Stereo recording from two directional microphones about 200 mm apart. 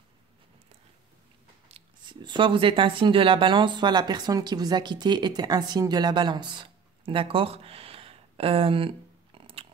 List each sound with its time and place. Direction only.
1.7 s speech: 25° right (ahead or behind)